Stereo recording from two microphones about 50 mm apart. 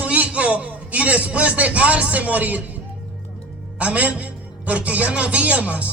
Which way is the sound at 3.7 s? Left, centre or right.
Right.